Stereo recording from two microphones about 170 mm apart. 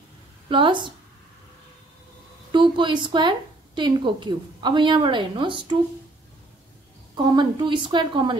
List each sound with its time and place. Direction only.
0.5 s a woman's voice: 30° right (ahead or behind)
2.5 s a woman's voice: 30° right (ahead or behind)
7.3 s a woman's voice: 25° right (ahead or behind)